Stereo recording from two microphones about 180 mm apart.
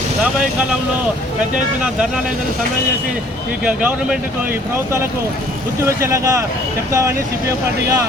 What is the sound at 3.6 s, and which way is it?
Speech, 5° right (ahead or behind).